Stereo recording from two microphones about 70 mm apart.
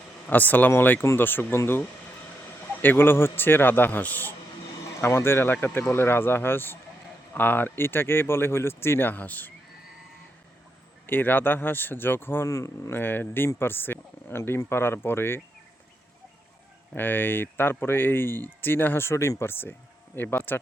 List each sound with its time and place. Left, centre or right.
0.3 s a man's voice: left
4.9 s speech: left
11.0 s a man's voice: left
12.5 s speech: left
12.9 s speech: left
16.9 s a man's voice: left